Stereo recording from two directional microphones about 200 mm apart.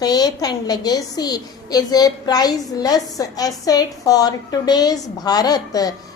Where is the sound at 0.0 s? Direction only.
20° left (ahead or behind).